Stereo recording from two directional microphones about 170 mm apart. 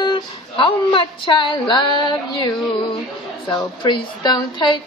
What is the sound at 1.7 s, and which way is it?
Female singing, 25° left (ahead or behind).